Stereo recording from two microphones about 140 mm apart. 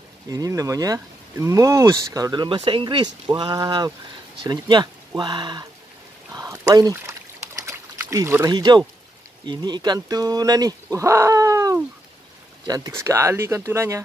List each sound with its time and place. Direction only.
0.3 s speech: 25° right (ahead or behind)
6.3 s trickle: 25° right (ahead or behind)
8.5 s speech: 30° right (ahead or behind)